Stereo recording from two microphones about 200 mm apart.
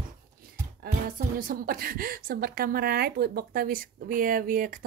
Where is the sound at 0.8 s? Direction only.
45° right (ahead or behind).